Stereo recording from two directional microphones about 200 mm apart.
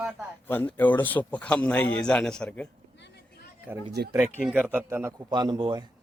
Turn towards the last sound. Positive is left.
turn(degrees=-25)  # may be behind; listen again after turning